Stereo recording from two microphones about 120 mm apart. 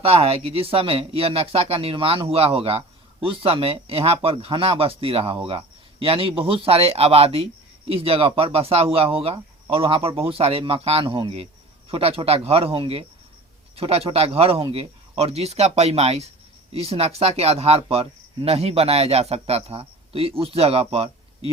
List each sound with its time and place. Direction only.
0.0 s speech: 55° right (ahead or behind)